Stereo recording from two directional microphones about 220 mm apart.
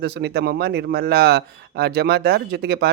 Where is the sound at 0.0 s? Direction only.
50° right (ahead or behind).